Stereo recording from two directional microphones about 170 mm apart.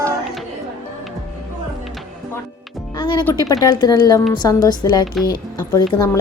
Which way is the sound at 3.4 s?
25° left (ahead or behind).